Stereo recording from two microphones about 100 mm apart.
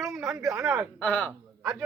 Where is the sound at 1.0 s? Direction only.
15° left (ahead or behind).